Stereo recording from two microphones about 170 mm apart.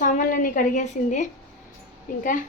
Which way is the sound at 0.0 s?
50° left (ahead or behind).